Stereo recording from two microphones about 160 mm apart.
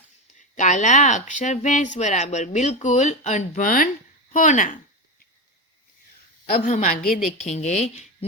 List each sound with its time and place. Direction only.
0.3 s speech: 50° left (ahead or behind)
6.4 s speech: 55° left (ahead or behind)
7.4 s speech: 45° left (ahead or behind)